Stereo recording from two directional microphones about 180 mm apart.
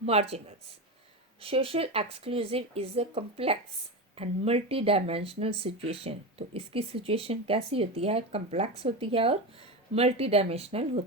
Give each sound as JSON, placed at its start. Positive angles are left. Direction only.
{"t": 0.0, "sound": "speech", "side_deg": -35}